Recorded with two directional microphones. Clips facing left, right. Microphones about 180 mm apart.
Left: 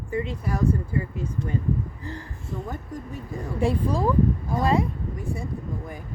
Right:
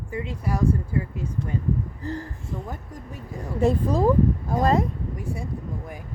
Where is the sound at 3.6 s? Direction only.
45° right (ahead or behind).